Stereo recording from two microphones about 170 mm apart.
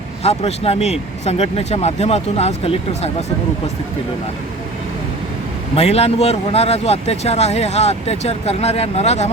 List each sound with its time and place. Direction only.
0.2 s speech: 35° left (ahead or behind)
5.7 s speech: 35° left (ahead or behind)